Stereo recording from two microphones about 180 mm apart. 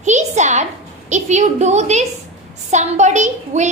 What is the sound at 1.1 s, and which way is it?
A child's voice, 40° right (ahead or behind).